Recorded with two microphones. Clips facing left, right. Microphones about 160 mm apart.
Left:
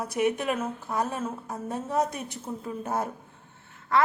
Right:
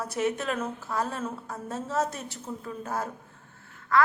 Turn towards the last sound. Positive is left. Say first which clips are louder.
# left 1 dB
turn(degrees=25)  # may be behind; listen again after turning